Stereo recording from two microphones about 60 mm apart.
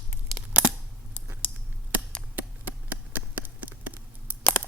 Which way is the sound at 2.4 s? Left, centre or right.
Right.